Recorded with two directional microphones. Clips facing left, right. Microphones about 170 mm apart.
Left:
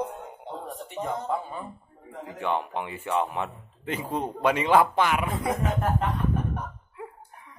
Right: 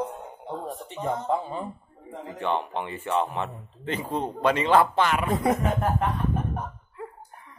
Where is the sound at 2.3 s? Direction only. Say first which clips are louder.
Right 1 dB; 10° left (ahead or behind).